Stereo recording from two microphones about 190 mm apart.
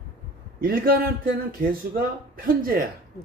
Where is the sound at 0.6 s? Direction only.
50° right (ahead or behind).